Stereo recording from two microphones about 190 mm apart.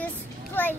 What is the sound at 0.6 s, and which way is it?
Speech, 10° left (ahead or behind).